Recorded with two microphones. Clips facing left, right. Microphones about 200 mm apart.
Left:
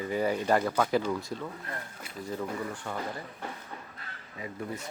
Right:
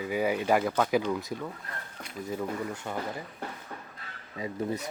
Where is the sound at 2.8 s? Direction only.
10° right (ahead or behind).